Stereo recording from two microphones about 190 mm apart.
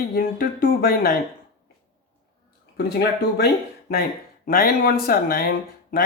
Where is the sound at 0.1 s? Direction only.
50° left (ahead or behind).